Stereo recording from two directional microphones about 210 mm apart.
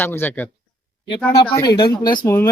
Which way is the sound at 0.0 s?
10° left (ahead or behind).